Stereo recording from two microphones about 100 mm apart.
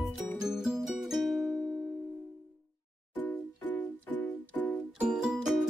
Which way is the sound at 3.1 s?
15° left (ahead or behind).